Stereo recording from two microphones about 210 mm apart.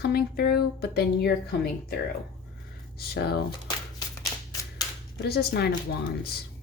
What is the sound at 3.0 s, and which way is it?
Speech, 50° left (ahead or behind).